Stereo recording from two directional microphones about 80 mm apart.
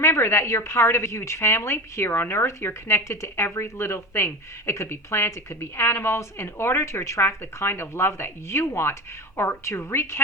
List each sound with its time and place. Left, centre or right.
0.0 s a woman's voice: left